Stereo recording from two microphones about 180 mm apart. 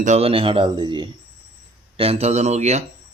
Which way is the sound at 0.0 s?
40° right (ahead or behind).